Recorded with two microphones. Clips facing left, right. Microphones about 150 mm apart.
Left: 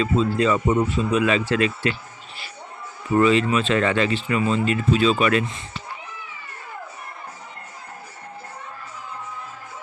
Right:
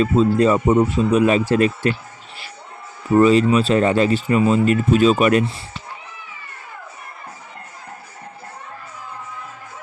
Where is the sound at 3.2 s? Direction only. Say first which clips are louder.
Right 4 dB; 40° right (ahead or behind).